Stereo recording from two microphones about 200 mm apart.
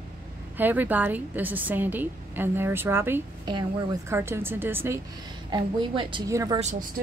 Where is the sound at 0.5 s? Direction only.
10° right (ahead or behind).